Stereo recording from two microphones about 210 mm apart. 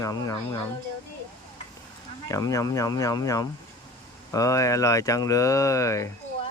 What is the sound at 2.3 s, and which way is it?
Speech, 15° left (ahead or behind).